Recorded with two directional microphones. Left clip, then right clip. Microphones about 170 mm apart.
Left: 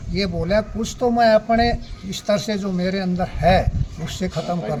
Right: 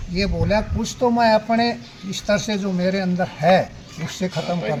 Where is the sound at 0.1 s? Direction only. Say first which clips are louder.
Even; 15° left (ahead or behind).